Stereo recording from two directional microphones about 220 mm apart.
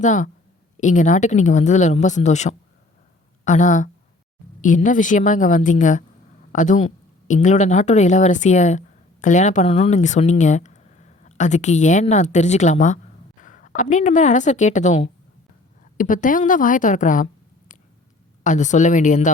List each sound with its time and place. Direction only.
0.0 s a woman's voice: 35° left (ahead or behind)
18.4 s speech: 35° left (ahead or behind)